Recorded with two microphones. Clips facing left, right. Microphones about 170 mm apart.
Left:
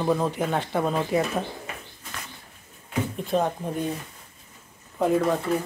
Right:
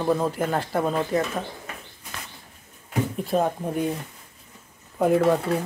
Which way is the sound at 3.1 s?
5° right (ahead or behind).